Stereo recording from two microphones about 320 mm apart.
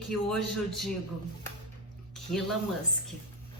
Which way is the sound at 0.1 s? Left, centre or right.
Centre.